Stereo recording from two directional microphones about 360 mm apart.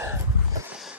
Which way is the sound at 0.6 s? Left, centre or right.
Centre.